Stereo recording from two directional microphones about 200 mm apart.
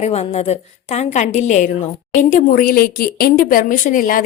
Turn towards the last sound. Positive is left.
turn(degrees=45)  # may be behind; listen again after turning